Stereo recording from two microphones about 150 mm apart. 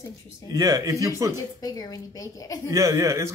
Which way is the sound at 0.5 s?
25° right (ahead or behind).